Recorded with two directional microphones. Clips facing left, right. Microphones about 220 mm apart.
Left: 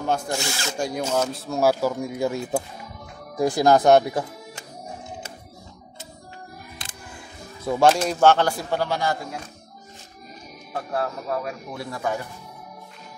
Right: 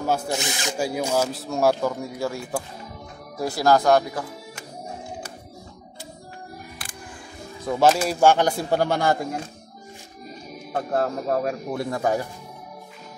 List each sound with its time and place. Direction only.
0.0 s speech: 5° right (ahead or behind)
0.3 s speech: 20° right (ahead or behind)
0.7 s speech: 5° right (ahead or behind); by 4.3 s 25° left (ahead or behind)
7.6 s speech: centre (ahead or behind)
8.5 s speech: 40° right (ahead or behind)
10.7 s speech: 40° right (ahead or behind)